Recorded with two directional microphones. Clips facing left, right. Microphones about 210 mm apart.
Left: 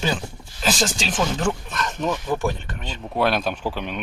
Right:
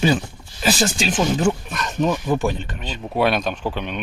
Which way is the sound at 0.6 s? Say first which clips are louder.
Right 3 dB; 10° right (ahead or behind).